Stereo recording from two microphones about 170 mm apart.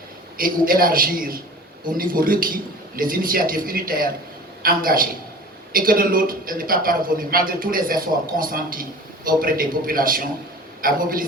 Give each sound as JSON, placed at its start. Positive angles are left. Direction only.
{"t": 0.3, "sound": "a man's voice", "side_deg": -55}